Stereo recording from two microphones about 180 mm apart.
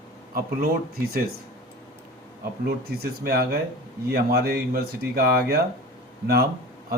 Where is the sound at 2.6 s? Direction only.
60° right (ahead or behind).